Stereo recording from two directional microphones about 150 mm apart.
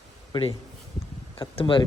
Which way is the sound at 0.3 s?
35° left (ahead or behind).